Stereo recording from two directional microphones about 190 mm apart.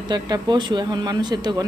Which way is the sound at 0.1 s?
20° right (ahead or behind).